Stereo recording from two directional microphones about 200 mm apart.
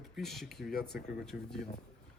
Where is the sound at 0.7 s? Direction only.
50° left (ahead or behind).